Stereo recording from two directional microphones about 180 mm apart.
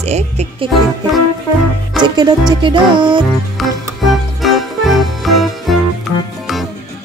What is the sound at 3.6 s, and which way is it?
Music, centre (ahead or behind).